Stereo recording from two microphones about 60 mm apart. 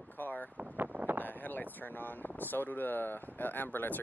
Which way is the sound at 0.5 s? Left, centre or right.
Right.